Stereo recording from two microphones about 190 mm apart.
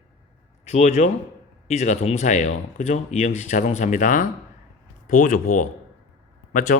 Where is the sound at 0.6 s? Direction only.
35° left (ahead or behind).